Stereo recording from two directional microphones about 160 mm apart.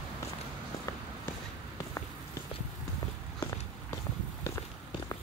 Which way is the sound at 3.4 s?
20° left (ahead or behind).